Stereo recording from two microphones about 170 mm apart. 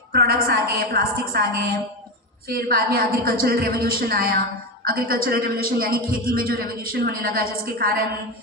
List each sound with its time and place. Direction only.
0.1 s a woman's voice: 65° right (ahead or behind)